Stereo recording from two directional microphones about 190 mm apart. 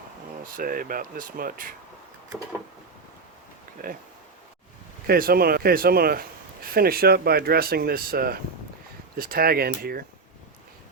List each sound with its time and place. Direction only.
0.4 s a man's voice: 45° right (ahead or behind)
3.8 s a man's voice: 45° right (ahead or behind)
5.0 s a man's voice: 50° right (ahead or behind)